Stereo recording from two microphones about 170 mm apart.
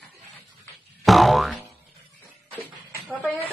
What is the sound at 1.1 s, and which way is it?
Speech, centre (ahead or behind).